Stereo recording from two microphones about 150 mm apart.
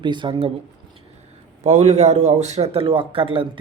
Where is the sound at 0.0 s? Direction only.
30° right (ahead or behind).